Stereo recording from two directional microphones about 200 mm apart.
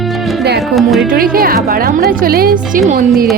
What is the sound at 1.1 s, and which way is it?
A woman's voice, 45° right (ahead or behind).